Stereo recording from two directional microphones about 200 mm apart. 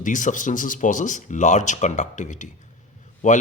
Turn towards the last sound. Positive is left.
turn(degrees=40)  # may be behind; listen again after turning